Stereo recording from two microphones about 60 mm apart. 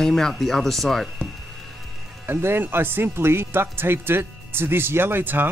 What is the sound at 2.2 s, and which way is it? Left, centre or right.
Speech, right.